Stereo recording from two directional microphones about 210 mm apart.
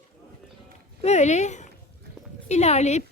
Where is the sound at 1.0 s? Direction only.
35° left (ahead or behind).